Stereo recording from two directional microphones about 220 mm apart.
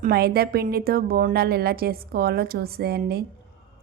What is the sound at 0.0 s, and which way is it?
A woman's voice, 45° right (ahead or behind).